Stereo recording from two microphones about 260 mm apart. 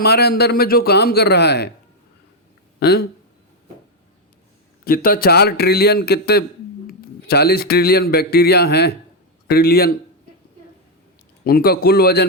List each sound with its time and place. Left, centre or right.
0.0 s a man's voice: left
2.8 s a man's voice: left
4.9 s a man's voice: left
11.4 s a man's voice: left